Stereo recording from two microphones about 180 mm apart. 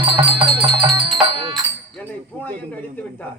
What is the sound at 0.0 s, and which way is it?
Music, 30° right (ahead or behind).